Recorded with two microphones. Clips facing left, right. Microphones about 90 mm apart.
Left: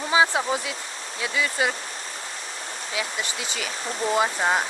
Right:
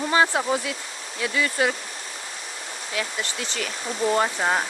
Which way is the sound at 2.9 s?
10° left (ahead or behind).